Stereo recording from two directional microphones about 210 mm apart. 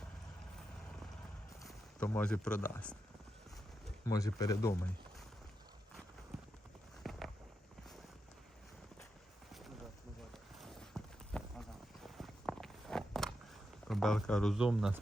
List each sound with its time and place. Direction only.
1.6 s speech: 5° left (ahead or behind)
4.0 s speech: 15° left (ahead or behind)
7.0 s a sound: centre (ahead or behind)
10.3 s clip-clop: centre (ahead or behind)
12.0 s walk: centre (ahead or behind)
13.8 s speech: centre (ahead or behind)